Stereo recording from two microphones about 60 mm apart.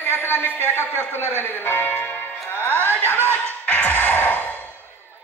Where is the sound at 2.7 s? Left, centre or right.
Right.